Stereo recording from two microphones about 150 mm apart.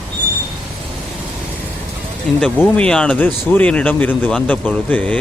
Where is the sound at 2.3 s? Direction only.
5° left (ahead or behind).